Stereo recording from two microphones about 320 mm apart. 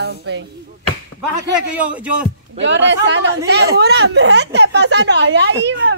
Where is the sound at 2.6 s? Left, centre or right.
Right.